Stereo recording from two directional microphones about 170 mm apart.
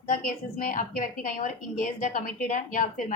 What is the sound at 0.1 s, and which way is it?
A woman's voice, 55° left (ahead or behind).